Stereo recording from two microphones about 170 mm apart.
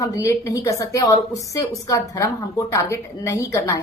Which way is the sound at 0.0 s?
15° left (ahead or behind).